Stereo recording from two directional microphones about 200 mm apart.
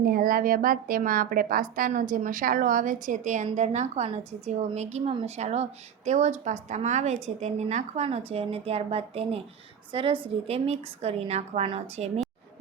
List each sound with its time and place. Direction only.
0.0 s a woman's voice: 45° right (ahead or behind)